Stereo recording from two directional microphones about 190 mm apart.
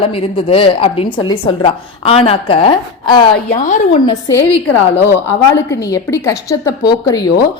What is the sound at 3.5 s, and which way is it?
Speech, 40° left (ahead or behind).